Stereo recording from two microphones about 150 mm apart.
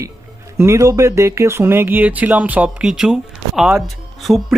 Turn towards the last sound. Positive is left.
turn(degrees=0)  # may be behind; listen again after turning